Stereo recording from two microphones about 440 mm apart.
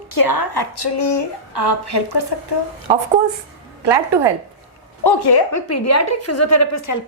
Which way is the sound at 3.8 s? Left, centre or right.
Right.